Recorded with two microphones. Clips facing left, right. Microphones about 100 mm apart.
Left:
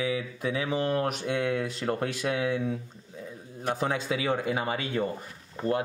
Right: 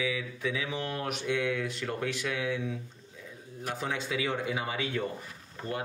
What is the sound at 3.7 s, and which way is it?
Mantra, 45° left (ahead or behind).